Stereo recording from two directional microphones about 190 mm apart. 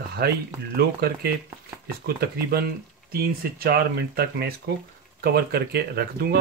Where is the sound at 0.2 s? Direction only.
55° right (ahead or behind).